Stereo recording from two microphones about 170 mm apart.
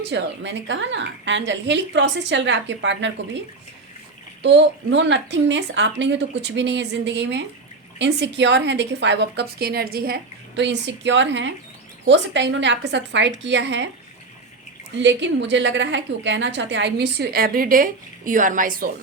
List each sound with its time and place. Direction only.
0.1 s a woman's voice: 90° right
4.4 s a woman's voice: 90° right
14.9 s a woman's voice: 90° right; by 18.9 s 55° right (ahead or behind)